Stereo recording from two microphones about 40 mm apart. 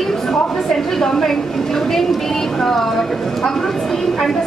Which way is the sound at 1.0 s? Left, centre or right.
Centre.